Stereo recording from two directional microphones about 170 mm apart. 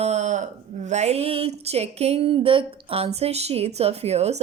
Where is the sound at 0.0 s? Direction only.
40° right (ahead or behind).